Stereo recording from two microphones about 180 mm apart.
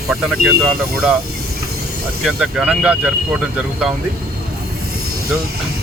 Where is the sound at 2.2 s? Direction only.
5° right (ahead or behind).